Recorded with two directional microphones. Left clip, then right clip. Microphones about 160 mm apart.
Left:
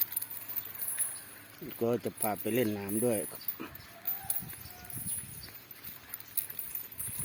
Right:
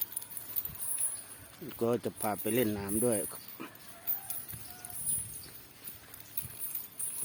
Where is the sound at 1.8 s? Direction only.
Centre (ahead or behind).